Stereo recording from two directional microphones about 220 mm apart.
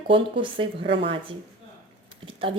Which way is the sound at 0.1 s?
20° right (ahead or behind).